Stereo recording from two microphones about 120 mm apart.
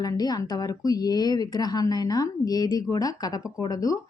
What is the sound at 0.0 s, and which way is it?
Speech, 35° left (ahead or behind).